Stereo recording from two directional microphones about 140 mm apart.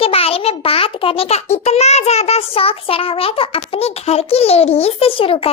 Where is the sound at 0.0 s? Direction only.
45° left (ahead or behind).